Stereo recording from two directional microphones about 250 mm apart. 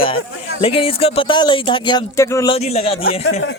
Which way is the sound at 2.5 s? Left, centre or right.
Left.